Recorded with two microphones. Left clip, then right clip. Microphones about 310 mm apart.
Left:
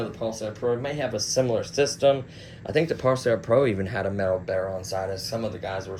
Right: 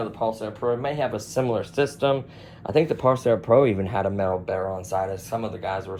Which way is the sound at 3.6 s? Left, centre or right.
Centre.